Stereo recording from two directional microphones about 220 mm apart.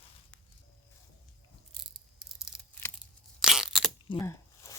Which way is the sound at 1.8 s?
Centre (ahead or behind).